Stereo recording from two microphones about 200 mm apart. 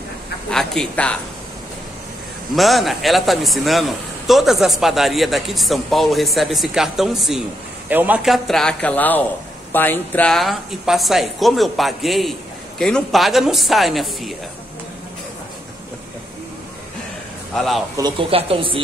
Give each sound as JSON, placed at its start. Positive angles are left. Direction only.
{"t": 0.5, "sound": "a man's voice", "side_deg": 5}
{"t": 2.5, "sound": "a man's voice", "side_deg": 0}
{"t": 17.6, "sound": "a man's voice", "side_deg": 0}
{"t": 17.9, "sound": "speech", "side_deg": -25}